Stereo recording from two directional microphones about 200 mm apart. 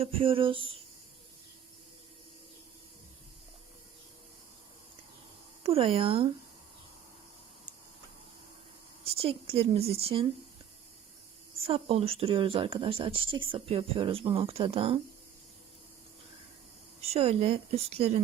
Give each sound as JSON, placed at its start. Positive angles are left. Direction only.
{"t": 0.0, "sound": "speech", "side_deg": -30}
{"t": 5.6, "sound": "speech", "side_deg": -30}
{"t": 9.0, "sound": "speech", "side_deg": -30}
{"t": 11.6, "sound": "speech", "side_deg": -30}
{"t": 17.0, "sound": "speech", "side_deg": -30}